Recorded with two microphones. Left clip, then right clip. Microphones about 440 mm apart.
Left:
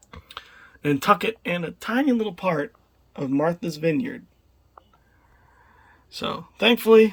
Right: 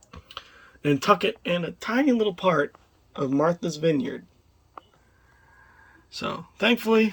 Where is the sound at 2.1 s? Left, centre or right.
Left.